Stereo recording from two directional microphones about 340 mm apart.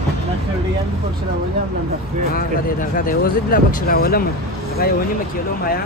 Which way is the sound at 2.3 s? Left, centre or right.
Left.